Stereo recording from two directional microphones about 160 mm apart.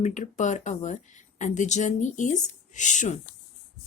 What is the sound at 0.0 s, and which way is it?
Speech, 50° left (ahead or behind).